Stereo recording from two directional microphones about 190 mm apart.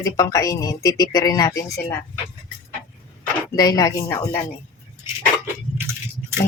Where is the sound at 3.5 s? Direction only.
20° left (ahead or behind).